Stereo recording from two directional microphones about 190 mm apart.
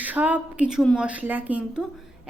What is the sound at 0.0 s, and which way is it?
Speech, 10° right (ahead or behind).